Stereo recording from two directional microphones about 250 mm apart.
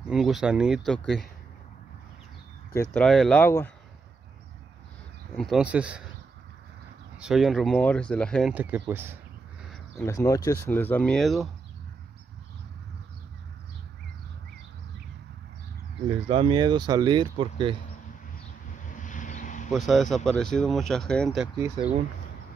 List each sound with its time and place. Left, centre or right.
0.0 s speech: centre
2.7 s speech: centre
5.4 s speech: centre
7.2 s speech: centre
9.9 s speech: centre
16.1 s speech: right
18.9 s vehicle: left
19.7 s speech: centre
21.5 s speech: centre